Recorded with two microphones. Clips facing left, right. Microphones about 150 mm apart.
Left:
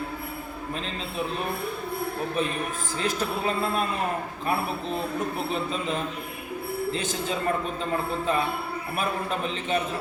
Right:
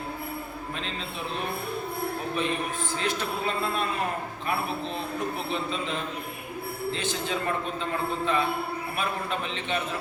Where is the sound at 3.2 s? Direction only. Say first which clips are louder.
Left 3 dB; 40° left (ahead or behind).